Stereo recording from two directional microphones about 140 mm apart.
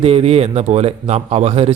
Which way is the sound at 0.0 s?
45° right (ahead or behind).